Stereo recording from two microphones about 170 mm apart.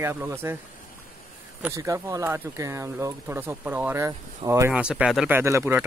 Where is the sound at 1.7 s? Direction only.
20° right (ahead or behind).